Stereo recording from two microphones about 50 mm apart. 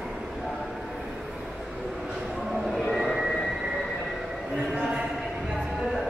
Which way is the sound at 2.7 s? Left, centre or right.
Centre.